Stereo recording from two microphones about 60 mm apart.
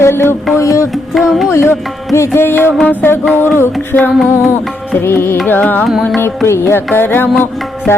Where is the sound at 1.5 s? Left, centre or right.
Left.